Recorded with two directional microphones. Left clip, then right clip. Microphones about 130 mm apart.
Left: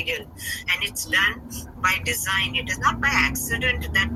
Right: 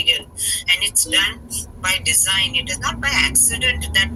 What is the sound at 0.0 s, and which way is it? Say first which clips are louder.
Vehicle: right 9 dB; 25° right (ahead or behind).